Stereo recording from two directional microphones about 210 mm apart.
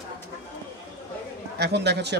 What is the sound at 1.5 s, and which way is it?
Speech, 50° right (ahead or behind).